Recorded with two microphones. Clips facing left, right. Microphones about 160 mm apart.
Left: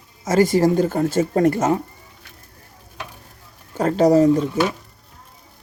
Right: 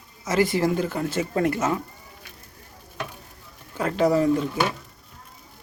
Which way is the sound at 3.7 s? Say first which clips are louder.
Left 6 dB; 40° left (ahead or behind).